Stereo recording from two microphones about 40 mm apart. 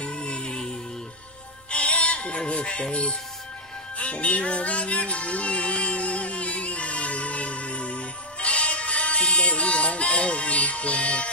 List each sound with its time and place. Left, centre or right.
0.0 s music: left
1.7 s music: left